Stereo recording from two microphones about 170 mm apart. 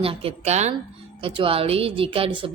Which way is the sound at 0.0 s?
35° right (ahead or behind).